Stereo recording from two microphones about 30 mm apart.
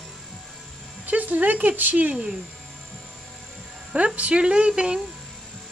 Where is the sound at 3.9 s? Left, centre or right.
Right.